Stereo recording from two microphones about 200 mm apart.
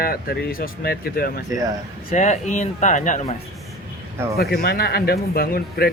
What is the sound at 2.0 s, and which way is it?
Speech, 35° left (ahead or behind).